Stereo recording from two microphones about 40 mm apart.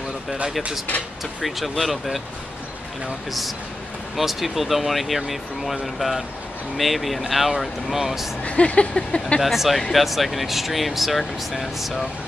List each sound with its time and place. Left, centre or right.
1.2 s speech: centre
3.3 s speech: centre
8.5 s speech: left
9.4 s speech: centre